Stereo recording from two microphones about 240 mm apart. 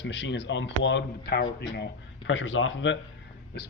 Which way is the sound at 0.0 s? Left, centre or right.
Left.